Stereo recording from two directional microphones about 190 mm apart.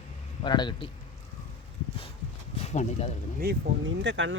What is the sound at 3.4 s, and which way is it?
Speech, 50° right (ahead or behind).